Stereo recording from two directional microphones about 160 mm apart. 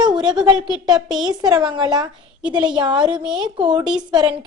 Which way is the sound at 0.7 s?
25° right (ahead or behind).